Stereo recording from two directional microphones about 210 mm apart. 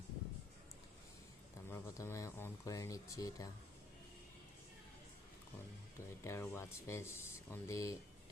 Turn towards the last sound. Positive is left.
turn(degrees=15)  # may be behind; listen again after turning